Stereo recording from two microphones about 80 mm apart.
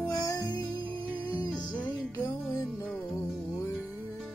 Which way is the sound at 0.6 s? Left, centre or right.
Right.